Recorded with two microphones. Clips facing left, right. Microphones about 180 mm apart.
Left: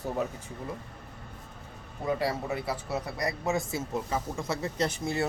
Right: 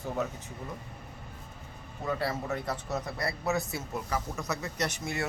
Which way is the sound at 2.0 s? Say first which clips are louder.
Left 3 dB; 15° left (ahead or behind).